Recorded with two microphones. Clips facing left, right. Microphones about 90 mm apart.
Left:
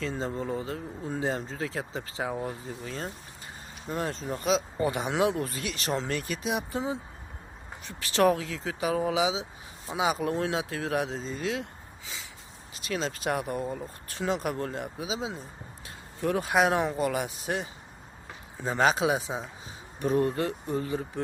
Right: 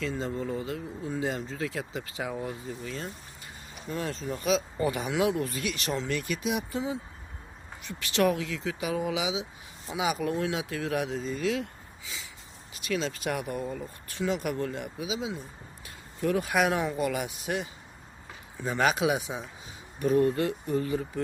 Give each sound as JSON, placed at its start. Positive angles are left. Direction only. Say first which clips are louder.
{"t": 0.0, "sound": "speech", "louder": "even", "side_deg": 35}
{"t": 12.7, "sound": "speech", "louder": "right 1 dB", "side_deg": 30}